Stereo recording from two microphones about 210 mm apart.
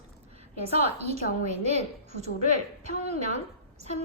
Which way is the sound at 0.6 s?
30° right (ahead or behind).